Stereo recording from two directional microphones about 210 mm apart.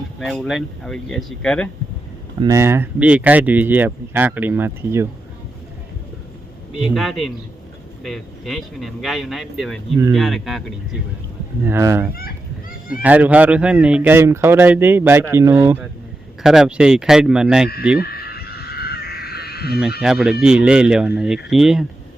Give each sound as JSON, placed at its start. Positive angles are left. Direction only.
{"t": 0.2, "sound": "a man's voice", "side_deg": 0}
{"t": 2.4, "sound": "speech", "side_deg": -15}
{"t": 6.8, "sound": "a man's voice", "side_deg": 0}
{"t": 11.6, "sound": "a man's voice", "side_deg": -15}
{"t": 18.0, "sound": "crow", "side_deg": 45}
{"t": 20.0, "sound": "a man's voice", "side_deg": 0}